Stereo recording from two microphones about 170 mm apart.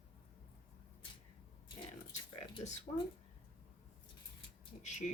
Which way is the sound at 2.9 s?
40° left (ahead or behind).